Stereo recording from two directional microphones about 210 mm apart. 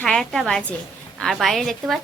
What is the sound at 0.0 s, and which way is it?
A woman's voice, 5° left (ahead or behind).